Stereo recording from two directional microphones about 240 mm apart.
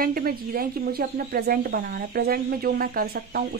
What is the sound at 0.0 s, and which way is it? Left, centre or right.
Speech, right.